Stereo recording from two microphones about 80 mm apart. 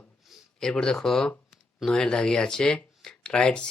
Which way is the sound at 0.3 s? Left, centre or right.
Centre.